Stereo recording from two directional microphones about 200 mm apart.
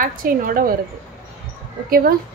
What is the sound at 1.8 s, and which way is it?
Speech, 50° right (ahead or behind).